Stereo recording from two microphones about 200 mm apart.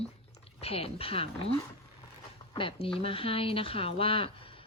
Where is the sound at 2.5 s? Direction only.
25° left (ahead or behind).